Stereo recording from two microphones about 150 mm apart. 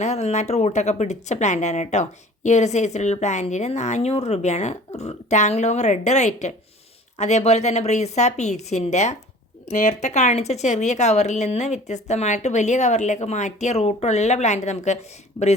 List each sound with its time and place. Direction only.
0.0 s a woman's voice: 45° left (ahead or behind)